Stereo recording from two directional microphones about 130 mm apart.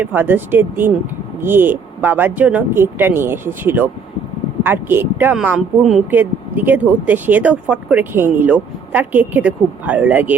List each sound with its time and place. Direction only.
0.0 s speech: 15° right (ahead or behind)